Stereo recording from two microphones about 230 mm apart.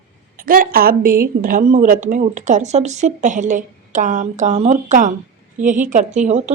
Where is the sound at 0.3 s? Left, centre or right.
Right.